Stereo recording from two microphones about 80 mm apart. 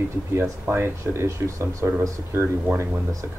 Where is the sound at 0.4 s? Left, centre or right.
Right.